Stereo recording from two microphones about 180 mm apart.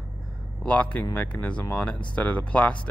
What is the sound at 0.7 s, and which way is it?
Speech, 5° left (ahead or behind).